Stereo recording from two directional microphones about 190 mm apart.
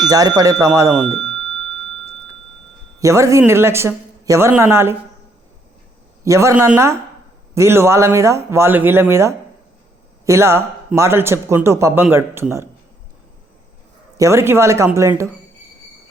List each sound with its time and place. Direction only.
0.1 s speech: 20° right (ahead or behind)
3.0 s speech: 15° right (ahead or behind)
6.2 s speech: 15° right (ahead or behind)
14.2 s speech: 15° right (ahead or behind)